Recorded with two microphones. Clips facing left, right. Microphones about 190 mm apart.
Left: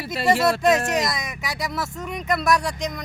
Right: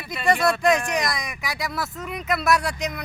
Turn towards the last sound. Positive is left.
turn(degrees=-5)  # may be behind; listen again after turning